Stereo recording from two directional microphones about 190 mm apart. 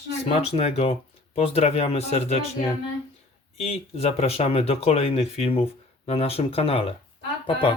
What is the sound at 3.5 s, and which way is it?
Speech, 35° left (ahead or behind).